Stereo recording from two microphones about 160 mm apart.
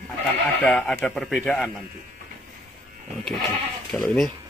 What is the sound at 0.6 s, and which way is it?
Speech, 10° left (ahead or behind).